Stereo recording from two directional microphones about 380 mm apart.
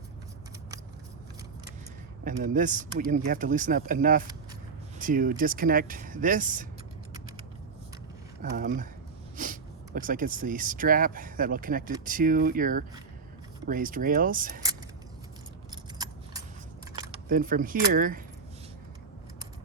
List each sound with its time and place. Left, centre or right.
2.2 s speech: right
8.4 s speech: right
15.7 s keys jangling: centre
16.9 s speech: centre